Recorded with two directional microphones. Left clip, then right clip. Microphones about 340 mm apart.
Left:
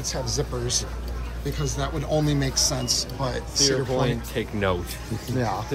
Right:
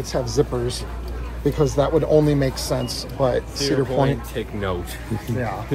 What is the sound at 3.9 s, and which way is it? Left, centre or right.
Speech, left.